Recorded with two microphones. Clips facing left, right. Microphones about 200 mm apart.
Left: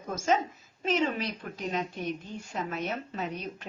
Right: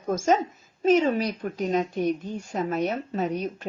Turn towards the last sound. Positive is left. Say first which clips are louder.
# right 8 dB
turn(degrees=-45)  # may be behind; listen again after turning